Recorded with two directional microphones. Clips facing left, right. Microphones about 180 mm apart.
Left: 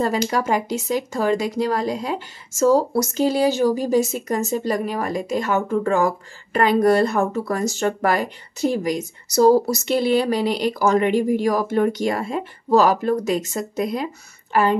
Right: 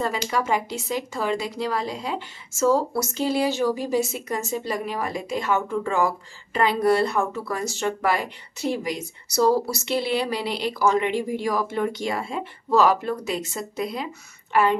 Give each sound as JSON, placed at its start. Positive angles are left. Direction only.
{"t": 0.0, "sound": "a woman's voice", "side_deg": 40}